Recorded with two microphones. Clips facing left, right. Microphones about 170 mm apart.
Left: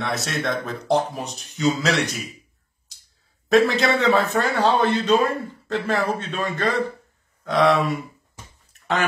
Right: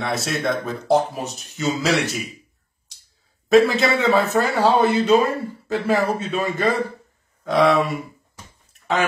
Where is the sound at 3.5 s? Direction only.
Centre (ahead or behind).